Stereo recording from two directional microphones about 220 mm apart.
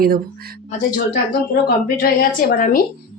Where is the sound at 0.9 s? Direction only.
40° left (ahead or behind).